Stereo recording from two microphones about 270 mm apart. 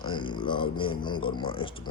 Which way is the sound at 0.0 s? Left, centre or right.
Centre.